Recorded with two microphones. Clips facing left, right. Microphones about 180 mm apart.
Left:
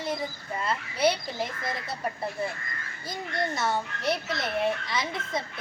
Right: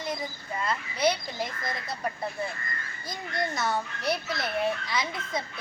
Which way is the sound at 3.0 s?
25° left (ahead or behind).